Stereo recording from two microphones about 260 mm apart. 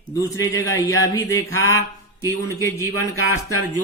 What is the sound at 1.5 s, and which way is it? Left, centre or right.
Speech, left.